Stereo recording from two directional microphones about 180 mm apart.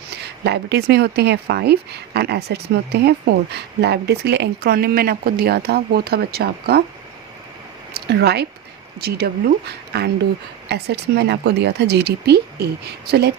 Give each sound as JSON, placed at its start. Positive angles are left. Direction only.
{"t": 0.2, "sound": "speech", "side_deg": -65}
{"t": 7.9, "sound": "speech", "side_deg": -65}